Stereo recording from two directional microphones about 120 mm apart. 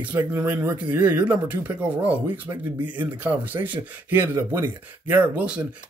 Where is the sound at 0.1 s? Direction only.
30° right (ahead or behind).